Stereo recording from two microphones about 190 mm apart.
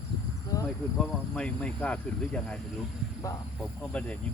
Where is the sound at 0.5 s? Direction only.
20° left (ahead or behind).